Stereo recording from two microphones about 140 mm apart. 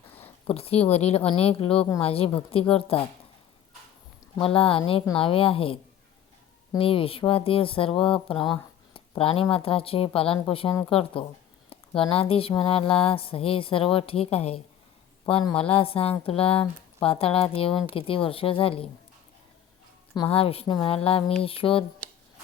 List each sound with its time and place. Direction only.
0.1 s a sound: 15° left (ahead or behind)
0.5 s speech: 45° left (ahead or behind)
4.4 s speech: 40° left (ahead or behind)
20.2 s speech: 45° left (ahead or behind)